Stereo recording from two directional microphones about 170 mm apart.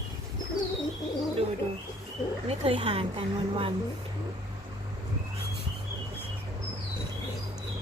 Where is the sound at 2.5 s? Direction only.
30° right (ahead or behind).